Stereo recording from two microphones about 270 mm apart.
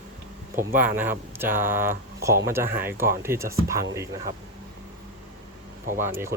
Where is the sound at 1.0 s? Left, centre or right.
Centre.